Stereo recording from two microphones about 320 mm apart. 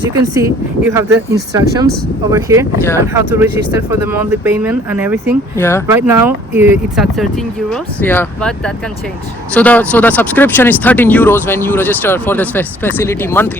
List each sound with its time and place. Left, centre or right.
0.1 s speech: centre
5.5 s speech: centre
5.9 s speech: centre